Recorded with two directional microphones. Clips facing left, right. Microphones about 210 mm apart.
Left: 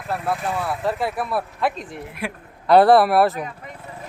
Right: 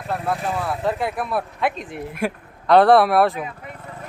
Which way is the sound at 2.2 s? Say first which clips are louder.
Right 6 dB; 45° right (ahead or behind).